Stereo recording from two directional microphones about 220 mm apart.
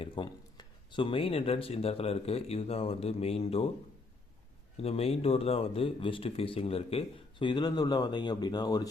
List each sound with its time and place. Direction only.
0.0 s speech: 20° left (ahead or behind)
4.8 s speech: 30° left (ahead or behind)